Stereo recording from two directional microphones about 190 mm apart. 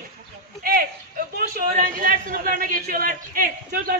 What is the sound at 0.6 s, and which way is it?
A man's voice, 50° right (ahead or behind).